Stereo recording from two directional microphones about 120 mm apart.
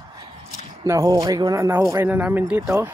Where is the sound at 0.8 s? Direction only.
30° right (ahead or behind); by 2.7 s 10° right (ahead or behind).